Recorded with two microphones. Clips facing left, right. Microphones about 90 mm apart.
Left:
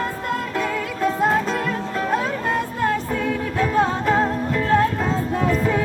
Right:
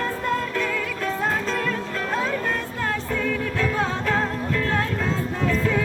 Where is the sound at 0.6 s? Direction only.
15° left (ahead or behind).